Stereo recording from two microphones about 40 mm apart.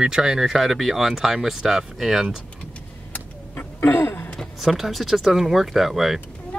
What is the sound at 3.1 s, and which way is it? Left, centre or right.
Vehicle, left.